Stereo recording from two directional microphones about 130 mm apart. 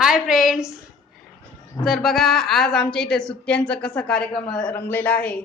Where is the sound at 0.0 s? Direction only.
5° right (ahead or behind).